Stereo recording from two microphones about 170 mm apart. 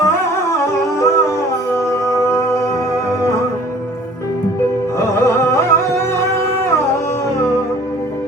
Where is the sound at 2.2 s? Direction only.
15° left (ahead or behind).